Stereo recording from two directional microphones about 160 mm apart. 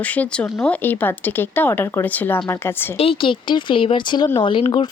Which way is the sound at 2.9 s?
35° left (ahead or behind).